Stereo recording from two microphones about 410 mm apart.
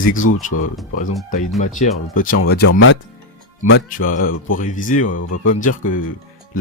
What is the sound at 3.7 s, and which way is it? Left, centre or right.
Speech, centre.